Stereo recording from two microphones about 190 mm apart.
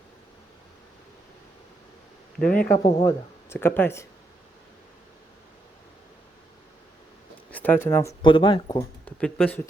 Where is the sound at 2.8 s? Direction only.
20° left (ahead or behind).